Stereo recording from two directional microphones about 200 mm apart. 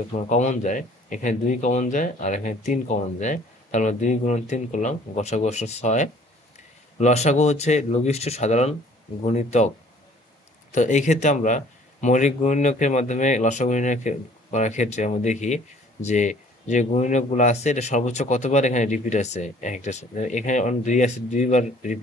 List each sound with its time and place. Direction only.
0.1 s speech: 35° left (ahead or behind)
10.7 s speech: 35° left (ahead or behind)